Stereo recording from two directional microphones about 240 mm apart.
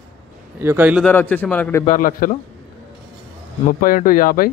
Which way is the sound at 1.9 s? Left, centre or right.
Left.